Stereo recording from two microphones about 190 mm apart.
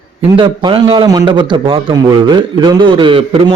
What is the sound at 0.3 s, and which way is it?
A man's voice, 25° right (ahead or behind).